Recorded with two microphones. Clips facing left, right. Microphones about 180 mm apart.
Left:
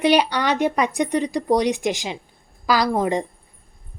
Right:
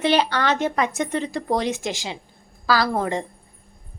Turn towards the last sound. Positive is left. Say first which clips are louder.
# left 2 dB
turn(degrees=15)  # may be behind; listen again after turning